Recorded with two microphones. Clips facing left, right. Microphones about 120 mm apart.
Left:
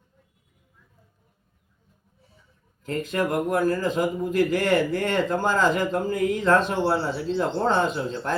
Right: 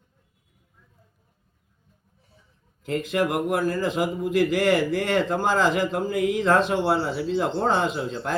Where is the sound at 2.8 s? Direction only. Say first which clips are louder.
Right 2 dB; 40° left (ahead or behind).